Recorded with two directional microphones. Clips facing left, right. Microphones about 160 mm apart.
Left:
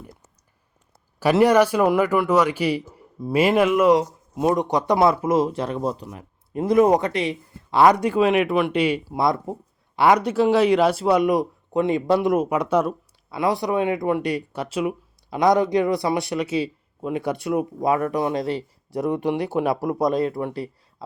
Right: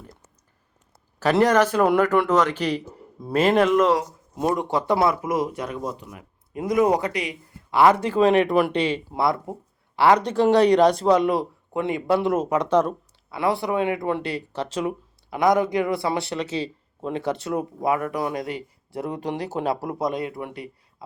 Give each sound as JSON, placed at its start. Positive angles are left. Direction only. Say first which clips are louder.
{"t": 1.2, "sound": "speech", "louder": "left 2 dB", "side_deg": 10}
{"t": 15.3, "sound": "speech", "louder": "left 2 dB", "side_deg": 20}
{"t": 18.9, "sound": "speech", "louder": "left 6 dB", "side_deg": -25}
{"t": 20.3, "sound": "speech", "louder": "left 6 dB", "side_deg": 35}